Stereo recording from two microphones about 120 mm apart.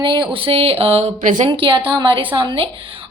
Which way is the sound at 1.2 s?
90° right.